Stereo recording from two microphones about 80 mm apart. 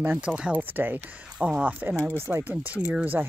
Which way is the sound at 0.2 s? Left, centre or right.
Centre.